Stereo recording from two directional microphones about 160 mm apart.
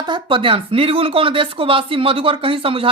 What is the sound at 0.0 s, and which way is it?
Speech, 30° right (ahead or behind).